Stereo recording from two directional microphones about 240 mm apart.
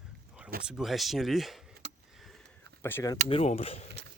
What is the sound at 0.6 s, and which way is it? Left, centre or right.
Speech, centre.